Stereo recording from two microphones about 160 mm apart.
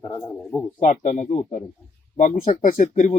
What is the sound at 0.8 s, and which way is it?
Speech, 50° left (ahead or behind).